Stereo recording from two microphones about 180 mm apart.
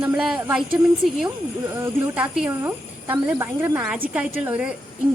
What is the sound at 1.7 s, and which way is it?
A woman's voice, 5° right (ahead or behind).